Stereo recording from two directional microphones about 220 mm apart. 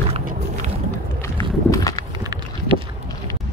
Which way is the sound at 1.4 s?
15° left (ahead or behind).